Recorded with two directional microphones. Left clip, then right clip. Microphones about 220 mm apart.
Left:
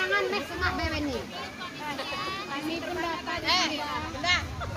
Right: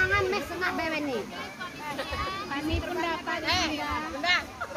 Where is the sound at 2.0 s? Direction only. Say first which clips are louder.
Right 2 dB; 50° right (ahead or behind).